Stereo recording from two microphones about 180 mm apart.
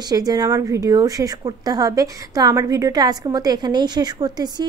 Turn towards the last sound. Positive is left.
turn(degrees=-20)  # may be behind; listen again after turning